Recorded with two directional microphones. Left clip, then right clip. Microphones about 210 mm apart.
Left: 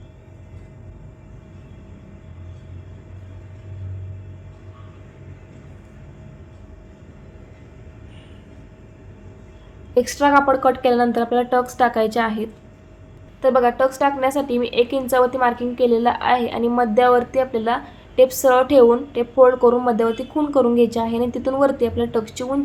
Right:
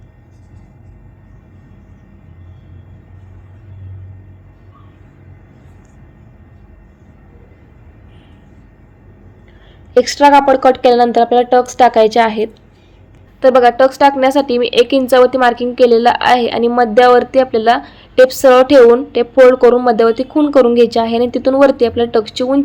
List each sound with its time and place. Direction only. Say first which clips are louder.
9.9 s speech: right 8 dB; 20° right (ahead or behind)